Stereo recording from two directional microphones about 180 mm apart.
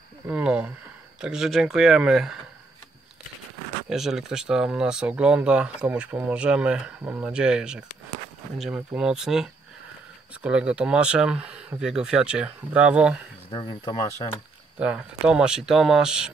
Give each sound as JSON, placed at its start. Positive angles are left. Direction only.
{"t": 0.3, "sound": "a sound", "side_deg": -5}
{"t": 1.2, "sound": "speech", "side_deg": -5}
{"t": 3.9, "sound": "speech", "side_deg": 0}
{"t": 13.5, "sound": "speech", "side_deg": 30}
{"t": 14.8, "sound": "speech", "side_deg": -5}